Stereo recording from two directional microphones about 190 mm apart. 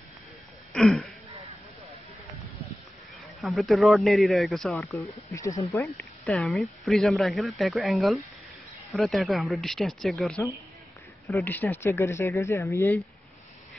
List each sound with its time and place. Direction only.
0.7 s throat clearing: centre (ahead or behind)
3.3 s speech: centre (ahead or behind)
4.9 s speech: 15° left (ahead or behind)
5.9 s speech: centre (ahead or behind)